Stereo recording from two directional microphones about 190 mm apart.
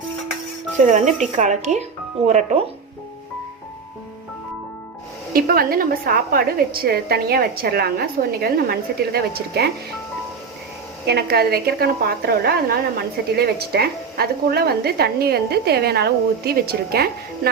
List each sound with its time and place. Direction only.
0.9 s speech: 40° right (ahead or behind)
5.3 s a woman's voice: 50° right (ahead or behind)
11.0 s a woman's voice: 60° right (ahead or behind)